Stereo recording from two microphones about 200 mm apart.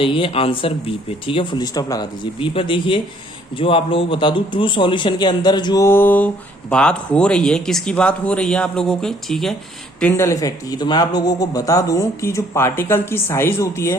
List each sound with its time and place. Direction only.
0.0 s a man's voice: 25° left (ahead or behind)